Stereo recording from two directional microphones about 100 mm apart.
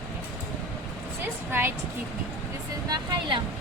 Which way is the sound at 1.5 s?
25° right (ahead or behind).